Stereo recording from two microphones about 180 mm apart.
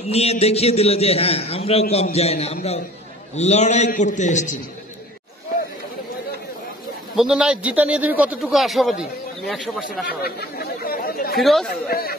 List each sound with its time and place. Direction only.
0.0 s a man's voice: 35° left (ahead or behind)
7.2 s a man's voice: 5° right (ahead or behind)
10.0 s chatter: 60° left (ahead or behind)
11.3 s a man's voice: centre (ahead or behind)
11.9 s speech: 55° left (ahead or behind)